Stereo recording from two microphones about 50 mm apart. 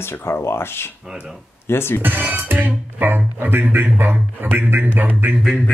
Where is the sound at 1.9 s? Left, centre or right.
Right.